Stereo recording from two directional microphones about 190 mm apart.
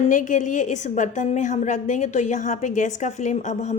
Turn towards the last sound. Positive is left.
turn(degrees=40)  # may be behind; listen again after turning